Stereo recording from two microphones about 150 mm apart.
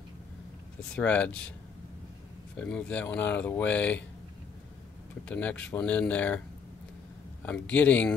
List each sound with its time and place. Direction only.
0.9 s speech: 10° left (ahead or behind)
2.6 s speech: 10° left (ahead or behind)
5.3 s speech: 10° left (ahead or behind)
7.4 s speech: 10° left (ahead or behind)